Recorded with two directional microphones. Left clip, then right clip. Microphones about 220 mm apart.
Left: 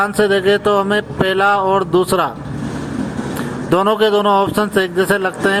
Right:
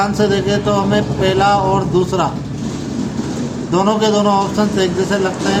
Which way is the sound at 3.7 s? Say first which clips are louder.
Left 1 dB; 40° left (ahead or behind).